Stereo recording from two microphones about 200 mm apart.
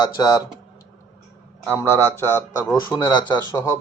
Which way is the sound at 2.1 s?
10° left (ahead or behind).